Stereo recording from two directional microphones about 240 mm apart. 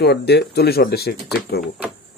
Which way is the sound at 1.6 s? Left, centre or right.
Centre.